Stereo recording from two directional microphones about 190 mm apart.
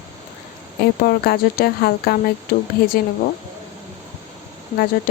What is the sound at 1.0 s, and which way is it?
Speech, 50° left (ahead or behind).